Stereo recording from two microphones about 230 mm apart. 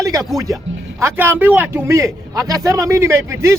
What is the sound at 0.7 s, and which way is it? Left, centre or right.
Music, right.